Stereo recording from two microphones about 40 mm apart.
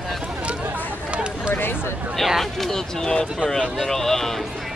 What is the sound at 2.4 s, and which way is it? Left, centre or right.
Speech, centre.